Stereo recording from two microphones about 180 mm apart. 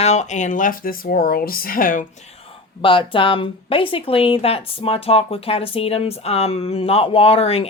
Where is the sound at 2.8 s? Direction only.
30° left (ahead or behind).